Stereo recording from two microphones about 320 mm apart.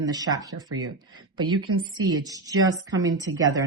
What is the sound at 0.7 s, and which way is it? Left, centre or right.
Speech, right.